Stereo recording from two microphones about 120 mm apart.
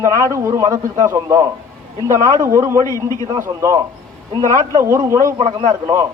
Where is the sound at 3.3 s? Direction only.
25° right (ahead or behind).